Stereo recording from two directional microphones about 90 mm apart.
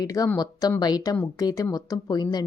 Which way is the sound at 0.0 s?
45° left (ahead or behind).